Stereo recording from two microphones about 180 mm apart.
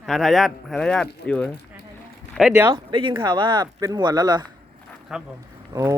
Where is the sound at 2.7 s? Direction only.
25° right (ahead or behind).